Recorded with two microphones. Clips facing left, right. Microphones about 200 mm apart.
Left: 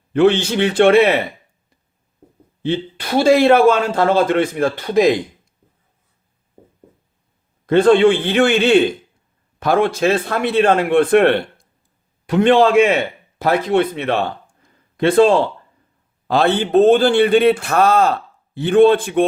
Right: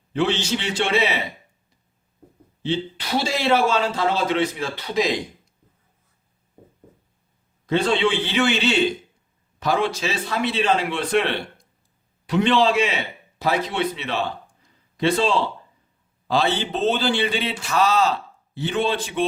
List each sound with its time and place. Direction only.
0.1 s a man's voice: 55° left (ahead or behind)
2.6 s a man's voice: 55° left (ahead or behind)
7.7 s a man's voice: 55° left (ahead or behind)